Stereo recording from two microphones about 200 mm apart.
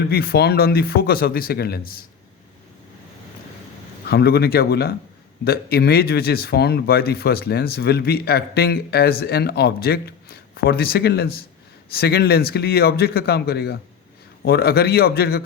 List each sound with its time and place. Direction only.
0.1 s speech: 50° left (ahead or behind)
4.1 s speech: 55° left (ahead or behind)